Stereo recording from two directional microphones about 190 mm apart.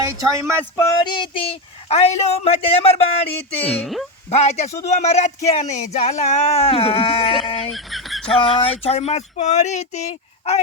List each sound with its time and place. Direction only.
0.8 s speech: 25° left (ahead or behind)
3.6 s speech: centre (ahead or behind)
4.3 s speech: 35° left (ahead or behind)
7.7 s a sound: centre (ahead or behind)
8.4 s speech: 30° left (ahead or behind)